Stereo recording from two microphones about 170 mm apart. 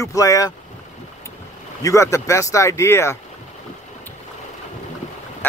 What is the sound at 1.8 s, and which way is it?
A man's voice, 20° left (ahead or behind).